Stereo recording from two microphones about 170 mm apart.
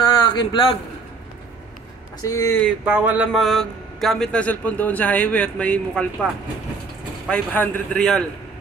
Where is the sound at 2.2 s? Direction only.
20° left (ahead or behind).